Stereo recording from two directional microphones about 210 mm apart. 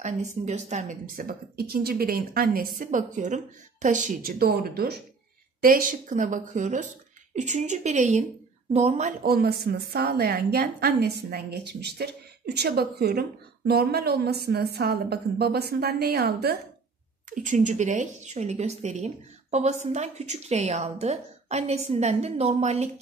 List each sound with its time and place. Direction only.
0.0 s a woman's voice: 35° right (ahead or behind); by 16.5 s 50° right (ahead or behind)
17.3 s a woman's voice: 35° right (ahead or behind)